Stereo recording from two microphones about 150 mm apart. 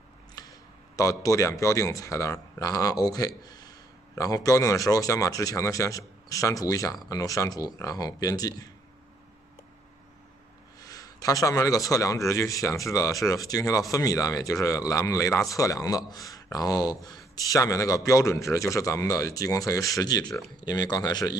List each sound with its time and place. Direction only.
0.4 s speech: 20° left (ahead or behind)
10.8 s speech: 25° left (ahead or behind)